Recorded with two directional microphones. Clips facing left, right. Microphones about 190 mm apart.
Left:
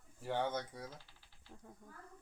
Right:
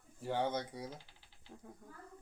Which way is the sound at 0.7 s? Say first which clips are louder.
Right 4 dB; 15° right (ahead or behind).